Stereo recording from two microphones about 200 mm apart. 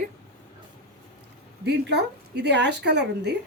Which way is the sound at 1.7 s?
60° right (ahead or behind).